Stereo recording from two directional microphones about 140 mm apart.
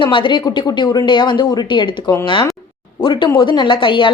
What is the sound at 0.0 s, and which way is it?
Speech, 35° left (ahead or behind).